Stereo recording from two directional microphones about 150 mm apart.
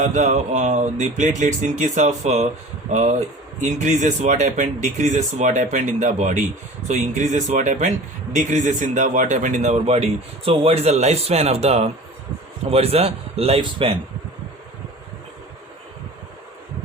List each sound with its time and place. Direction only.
0.0 s a man's voice: 55° right (ahead or behind); by 14.0 s 35° right (ahead or behind)